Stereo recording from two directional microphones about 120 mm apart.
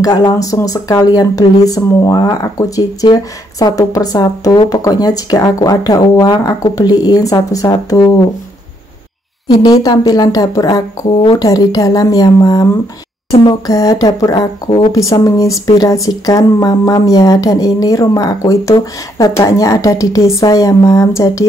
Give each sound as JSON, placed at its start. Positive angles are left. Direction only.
{"t": 0.0, "sound": "speech", "side_deg": 35}
{"t": 9.5, "sound": "speech", "side_deg": 35}
{"t": 13.3, "sound": "a sound", "side_deg": 50}
{"t": 13.7, "sound": "speech", "side_deg": 30}